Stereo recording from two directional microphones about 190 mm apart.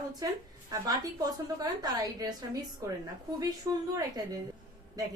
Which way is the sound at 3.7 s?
15° right (ahead or behind).